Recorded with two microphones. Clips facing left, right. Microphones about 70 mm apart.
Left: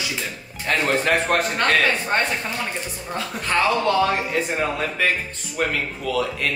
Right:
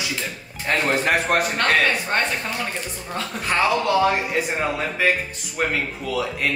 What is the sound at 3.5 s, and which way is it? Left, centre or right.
Speech, centre.